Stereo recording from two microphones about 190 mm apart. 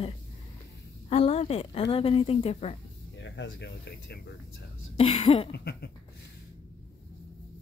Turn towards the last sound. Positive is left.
turn(degrees=60)  # may be behind; listen again after turning